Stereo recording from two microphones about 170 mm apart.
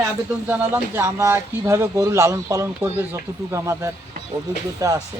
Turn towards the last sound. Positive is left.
turn(degrees=-20)  # may be behind; listen again after turning